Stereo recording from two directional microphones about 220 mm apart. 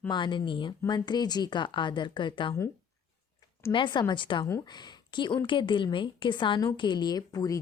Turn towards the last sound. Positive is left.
turn(degrees=15)  # may be behind; listen again after turning